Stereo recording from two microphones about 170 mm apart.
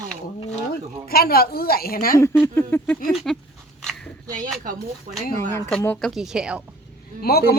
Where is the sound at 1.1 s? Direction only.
65° left (ahead or behind).